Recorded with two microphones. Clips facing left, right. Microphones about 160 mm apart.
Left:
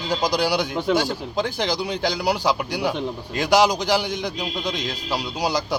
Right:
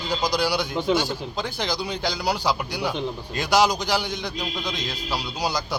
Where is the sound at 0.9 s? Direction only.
45° left (ahead or behind).